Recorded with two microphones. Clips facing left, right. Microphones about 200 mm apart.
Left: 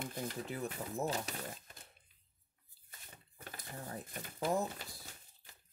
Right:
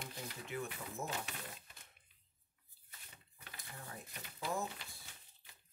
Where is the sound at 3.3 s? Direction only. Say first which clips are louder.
Left 6 dB; 40° left (ahead or behind).